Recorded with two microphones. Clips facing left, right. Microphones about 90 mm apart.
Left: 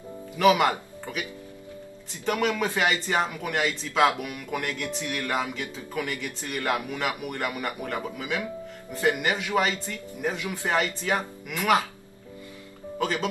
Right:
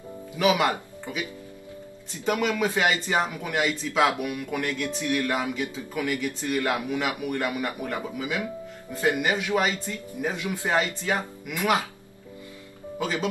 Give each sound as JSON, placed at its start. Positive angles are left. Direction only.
{"t": 0.4, "sound": "speech", "side_deg": -10}
{"t": 4.5, "sound": "speech", "side_deg": 5}
{"t": 4.8, "sound": "speech", "side_deg": -15}
{"t": 7.2, "sound": "speech", "side_deg": 5}
{"t": 7.5, "sound": "speech", "side_deg": -10}
{"t": 9.6, "sound": "speech", "side_deg": -10}
{"t": 13.0, "sound": "speech", "side_deg": -10}